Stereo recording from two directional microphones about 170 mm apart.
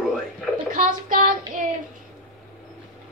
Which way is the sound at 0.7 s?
55° right (ahead or behind).